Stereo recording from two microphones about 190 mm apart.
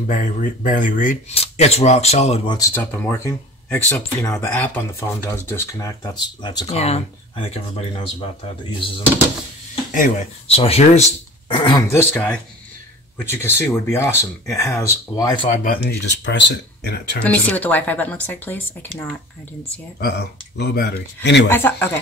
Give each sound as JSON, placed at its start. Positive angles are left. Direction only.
{"t": 0.0, "sound": "speech", "side_deg": 45}
{"t": 1.3, "sound": "speech", "side_deg": 35}
{"t": 2.5, "sound": "speech", "side_deg": 15}
{"t": 6.7, "sound": "speech", "side_deg": 35}
{"t": 10.5, "sound": "speech", "side_deg": 30}
{"t": 11.9, "sound": "speech", "side_deg": 10}
{"t": 15.5, "sound": "speech", "side_deg": 50}
{"t": 17.2, "sound": "speech", "side_deg": 10}
{"t": 20.0, "sound": "speech", "side_deg": 60}
{"t": 21.5, "sound": "speech", "side_deg": 10}